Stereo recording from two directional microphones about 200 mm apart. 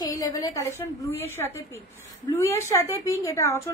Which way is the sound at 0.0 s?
15° left (ahead or behind).